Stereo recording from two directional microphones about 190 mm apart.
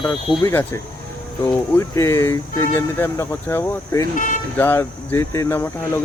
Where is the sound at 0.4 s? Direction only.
15° left (ahead or behind).